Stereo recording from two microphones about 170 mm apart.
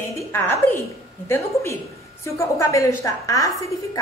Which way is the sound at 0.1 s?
15° left (ahead or behind).